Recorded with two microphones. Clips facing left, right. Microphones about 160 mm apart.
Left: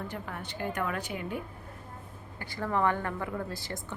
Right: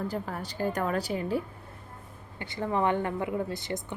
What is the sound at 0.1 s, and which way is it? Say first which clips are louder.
A woman's voice: right 5 dB; 35° right (ahead or behind).